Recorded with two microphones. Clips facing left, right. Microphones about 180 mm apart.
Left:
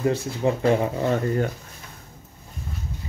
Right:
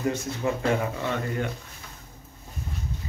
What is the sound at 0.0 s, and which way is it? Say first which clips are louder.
Speech: left 5 dB; 35° left (ahead or behind).